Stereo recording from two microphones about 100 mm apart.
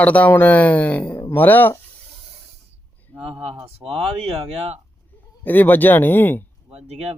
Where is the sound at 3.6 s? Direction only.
80° right.